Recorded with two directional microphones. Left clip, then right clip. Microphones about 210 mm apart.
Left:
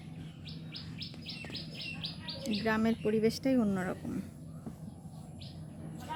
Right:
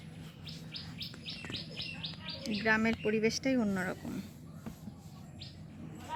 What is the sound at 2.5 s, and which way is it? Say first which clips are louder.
Speech: right 2 dB; 10° left (ahead or behind).